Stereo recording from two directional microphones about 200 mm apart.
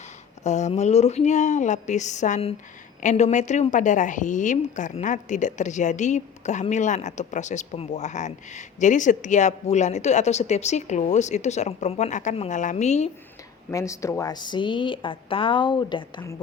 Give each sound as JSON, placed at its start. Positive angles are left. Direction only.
{"t": 0.4, "sound": "a woman's voice", "side_deg": 35}
{"t": 13.7, "sound": "speech", "side_deg": 15}